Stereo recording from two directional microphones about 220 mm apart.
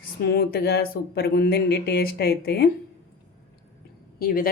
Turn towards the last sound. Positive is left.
turn(degrees=40)  # may be behind; listen again after turning